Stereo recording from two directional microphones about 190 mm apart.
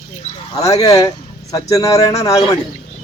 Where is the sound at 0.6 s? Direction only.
20° left (ahead or behind).